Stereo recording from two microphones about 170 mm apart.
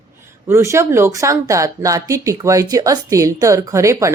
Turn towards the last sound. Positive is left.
turn(degrees=-15)  # may be behind; listen again after turning